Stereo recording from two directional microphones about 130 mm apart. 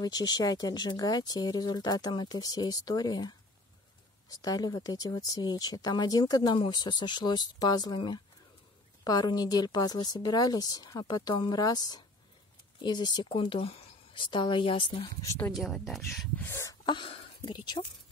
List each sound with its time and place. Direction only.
0.0 s speech: 30° left (ahead or behind)
15.5 s speech: centre (ahead or behind)
16.3 s speech: 20° left (ahead or behind)
16.8 s a sound: 40° left (ahead or behind)
17.5 s speech: 35° left (ahead or behind)